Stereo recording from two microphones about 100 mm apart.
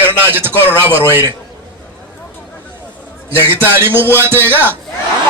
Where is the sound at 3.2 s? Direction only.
20° right (ahead or behind).